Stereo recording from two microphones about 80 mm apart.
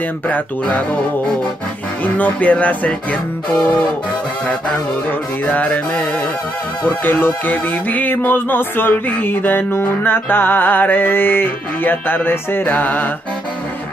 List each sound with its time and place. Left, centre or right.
0.3 s speech: centre
2.1 s speech: centre
5.4 s speech: centre
6.8 s music: left